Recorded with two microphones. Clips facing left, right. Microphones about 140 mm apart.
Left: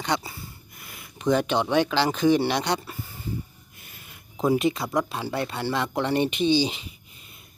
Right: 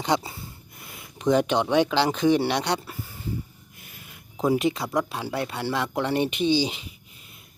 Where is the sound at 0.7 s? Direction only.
20° right (ahead or behind).